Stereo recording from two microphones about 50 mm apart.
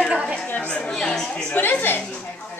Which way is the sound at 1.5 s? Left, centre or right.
Left.